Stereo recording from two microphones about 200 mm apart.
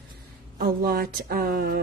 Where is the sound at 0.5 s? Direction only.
45° right (ahead or behind).